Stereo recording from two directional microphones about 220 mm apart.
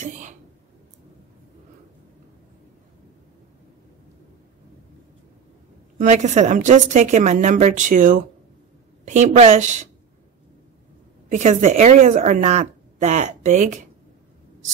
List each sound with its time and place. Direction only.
0.0 s a sound: 35° right (ahead or behind)
5.9 s a woman's voice: 30° right (ahead or behind)
11.2 s a woman's voice: 35° right (ahead or behind)